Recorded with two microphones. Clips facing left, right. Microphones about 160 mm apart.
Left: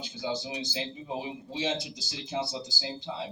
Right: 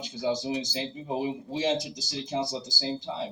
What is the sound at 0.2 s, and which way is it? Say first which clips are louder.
Speech: right 5 dB; 45° right (ahead or behind).